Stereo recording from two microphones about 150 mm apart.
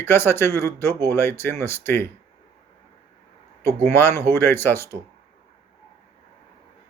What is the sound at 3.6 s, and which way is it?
Speech, 15° left (ahead or behind).